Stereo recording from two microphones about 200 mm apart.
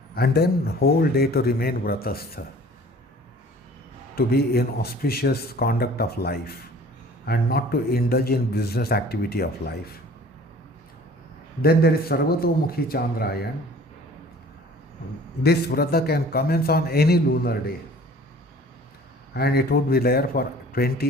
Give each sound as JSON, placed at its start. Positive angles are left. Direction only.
{"t": 0.2, "sound": "a man's voice", "side_deg": 50}
{"t": 4.1, "sound": "a man's voice", "side_deg": 50}
{"t": 11.6, "sound": "a man's voice", "side_deg": 50}
{"t": 15.4, "sound": "a man's voice", "side_deg": 50}
{"t": 19.3, "sound": "a man's voice", "side_deg": 50}